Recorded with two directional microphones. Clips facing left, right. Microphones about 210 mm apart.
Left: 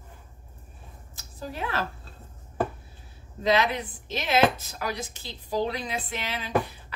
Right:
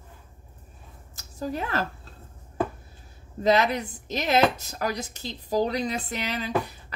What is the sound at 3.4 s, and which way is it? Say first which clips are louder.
Speech: right 2 dB; 45° right (ahead or behind).